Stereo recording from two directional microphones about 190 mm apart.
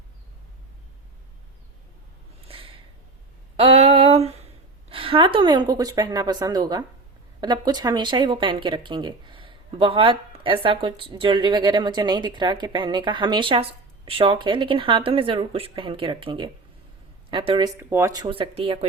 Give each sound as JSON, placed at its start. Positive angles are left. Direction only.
{"t": 3.6, "sound": "a sound", "side_deg": -30}
{"t": 4.9, "sound": "speech", "side_deg": -30}
{"t": 17.7, "sound": "speech", "side_deg": -15}